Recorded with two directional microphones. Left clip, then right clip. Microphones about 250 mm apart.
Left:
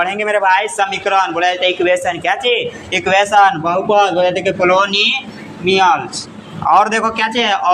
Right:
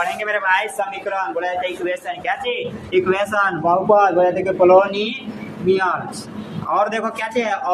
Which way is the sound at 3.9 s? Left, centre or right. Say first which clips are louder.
Left 2 dB; left.